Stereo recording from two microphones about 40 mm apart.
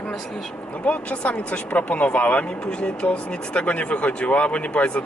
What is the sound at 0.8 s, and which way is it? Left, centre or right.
A woman's voice, left.